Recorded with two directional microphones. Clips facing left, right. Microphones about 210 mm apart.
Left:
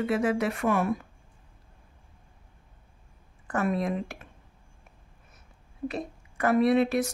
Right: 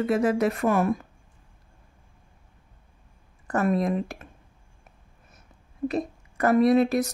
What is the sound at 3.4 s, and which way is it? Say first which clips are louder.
Speech: right 4 dB; 40° right (ahead or behind).